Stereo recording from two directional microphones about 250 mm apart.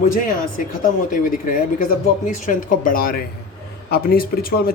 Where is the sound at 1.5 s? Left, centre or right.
Left.